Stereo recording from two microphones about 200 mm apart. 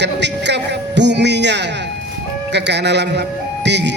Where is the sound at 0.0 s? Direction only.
60° right (ahead or behind).